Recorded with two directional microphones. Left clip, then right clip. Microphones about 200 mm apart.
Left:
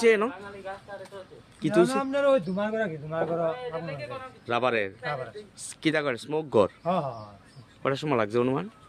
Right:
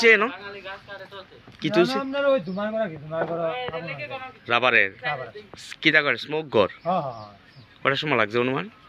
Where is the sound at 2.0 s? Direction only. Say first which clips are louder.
Right 1 dB; 25° left (ahead or behind).